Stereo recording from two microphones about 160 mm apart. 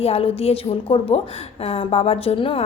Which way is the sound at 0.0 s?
40° left (ahead or behind).